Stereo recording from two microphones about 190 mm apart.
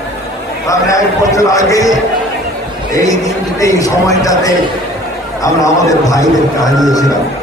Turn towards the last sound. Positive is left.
turn(degrees=20)  # may be behind; listen again after turning